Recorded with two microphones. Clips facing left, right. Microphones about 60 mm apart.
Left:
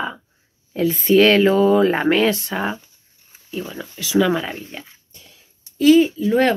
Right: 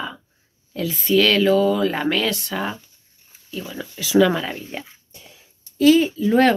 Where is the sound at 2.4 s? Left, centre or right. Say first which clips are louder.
Left 2 dB; centre.